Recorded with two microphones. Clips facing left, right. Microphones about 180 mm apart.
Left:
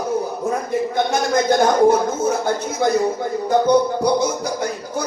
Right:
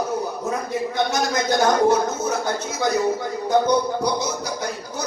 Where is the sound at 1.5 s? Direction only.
55° left (ahead or behind).